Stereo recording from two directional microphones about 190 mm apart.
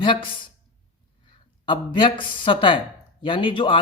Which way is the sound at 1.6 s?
25° left (ahead or behind).